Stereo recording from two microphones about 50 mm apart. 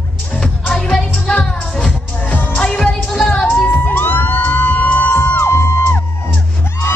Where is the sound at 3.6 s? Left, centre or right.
Left.